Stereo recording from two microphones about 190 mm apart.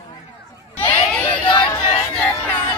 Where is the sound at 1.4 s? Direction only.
25° left (ahead or behind).